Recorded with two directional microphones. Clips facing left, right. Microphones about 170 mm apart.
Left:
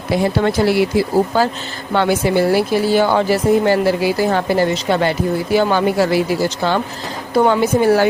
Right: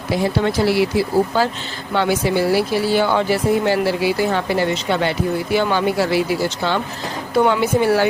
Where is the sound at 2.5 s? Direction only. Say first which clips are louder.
Left 3 dB; 45° left (ahead or behind).